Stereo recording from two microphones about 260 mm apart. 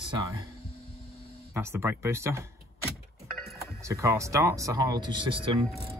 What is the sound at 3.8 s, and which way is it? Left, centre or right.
Speech, centre.